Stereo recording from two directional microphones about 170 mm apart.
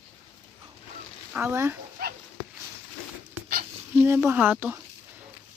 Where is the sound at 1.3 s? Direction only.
15° right (ahead or behind).